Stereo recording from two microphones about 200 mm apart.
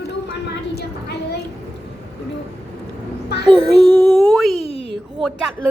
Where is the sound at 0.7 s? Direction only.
55° left (ahead or behind).